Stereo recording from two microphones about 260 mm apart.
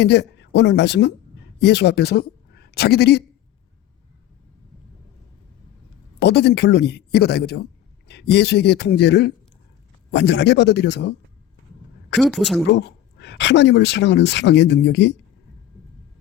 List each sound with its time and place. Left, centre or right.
0.0 s speech: left
6.2 s a man's voice: left
12.2 s speech: centre
12.6 s speech: left